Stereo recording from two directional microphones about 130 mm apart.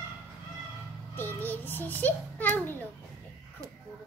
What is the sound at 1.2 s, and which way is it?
A child's voice, 15° left (ahead or behind).